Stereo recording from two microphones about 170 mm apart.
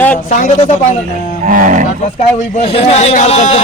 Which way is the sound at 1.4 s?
50° right (ahead or behind).